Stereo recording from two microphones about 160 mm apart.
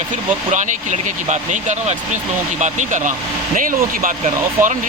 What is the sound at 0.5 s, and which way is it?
Speech, 50° right (ahead or behind).